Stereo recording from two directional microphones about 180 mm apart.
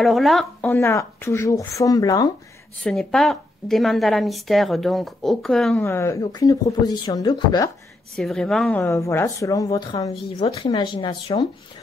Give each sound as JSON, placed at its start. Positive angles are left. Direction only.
{"t": 0.0, "sound": "a woman's voice", "side_deg": 0}
{"t": 0.7, "sound": "speech", "side_deg": 15}
{"t": 2.8, "sound": "a woman's voice", "side_deg": 5}
{"t": 5.8, "sound": "a woman's voice", "side_deg": 15}
{"t": 8.2, "sound": "a woman's voice", "side_deg": 0}
{"t": 8.8, "sound": "a woman's voice", "side_deg": 15}